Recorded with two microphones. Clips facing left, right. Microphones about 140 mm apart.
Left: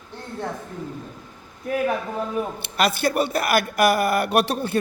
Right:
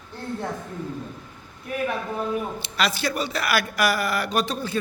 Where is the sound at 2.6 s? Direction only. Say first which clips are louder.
Left 3 dB; 55° left (ahead or behind).